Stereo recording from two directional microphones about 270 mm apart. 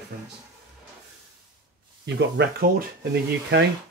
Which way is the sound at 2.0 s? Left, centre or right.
Right.